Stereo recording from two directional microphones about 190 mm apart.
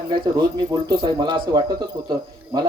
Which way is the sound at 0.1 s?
25° right (ahead or behind).